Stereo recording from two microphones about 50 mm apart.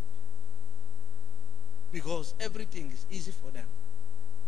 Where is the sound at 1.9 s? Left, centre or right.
Centre.